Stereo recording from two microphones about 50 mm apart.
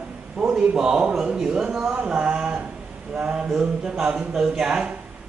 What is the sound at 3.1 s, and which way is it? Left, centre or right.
A man's voice, centre.